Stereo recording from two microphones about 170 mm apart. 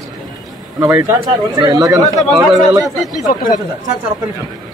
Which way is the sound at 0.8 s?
15° right (ahead or behind).